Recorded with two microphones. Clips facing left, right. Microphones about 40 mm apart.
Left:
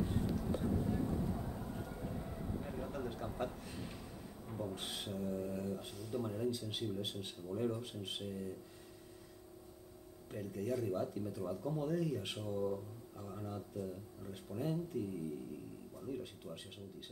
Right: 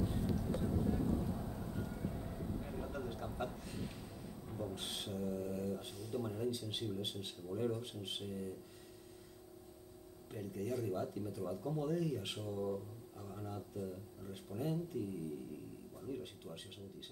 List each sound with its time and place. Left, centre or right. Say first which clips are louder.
0.0 s vehicle: left 1 dB; centre
7.2 s speech: left 1 dB; centre
10.3 s speech: left 2 dB; centre
16.1 s speech: left 1 dB; centre